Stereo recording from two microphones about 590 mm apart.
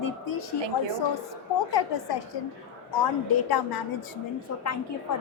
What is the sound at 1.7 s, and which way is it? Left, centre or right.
Speech, left.